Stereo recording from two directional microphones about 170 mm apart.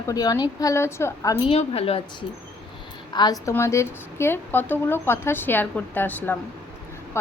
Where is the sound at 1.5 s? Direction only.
35° left (ahead or behind).